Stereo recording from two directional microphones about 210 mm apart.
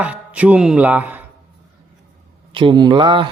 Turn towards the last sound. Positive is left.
turn(degrees=-25)  # may be behind; listen again after turning